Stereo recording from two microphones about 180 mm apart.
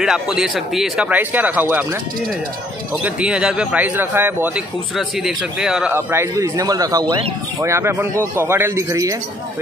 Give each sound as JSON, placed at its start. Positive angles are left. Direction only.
{"t": 0.0, "sound": "speech", "side_deg": -5}
{"t": 3.0, "sound": "speech", "side_deg": -5}
{"t": 5.9, "sound": "speech", "side_deg": -15}